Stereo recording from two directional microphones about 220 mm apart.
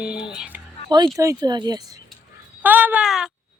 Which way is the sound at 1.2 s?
15° right (ahead or behind).